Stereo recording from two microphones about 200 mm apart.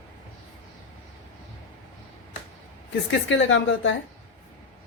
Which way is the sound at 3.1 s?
65° left (ahead or behind).